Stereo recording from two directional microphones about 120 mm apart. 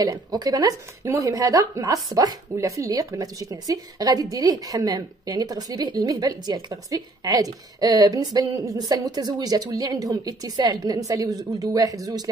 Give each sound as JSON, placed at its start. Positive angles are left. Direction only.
{"t": 0.0, "sound": "speech", "side_deg": -35}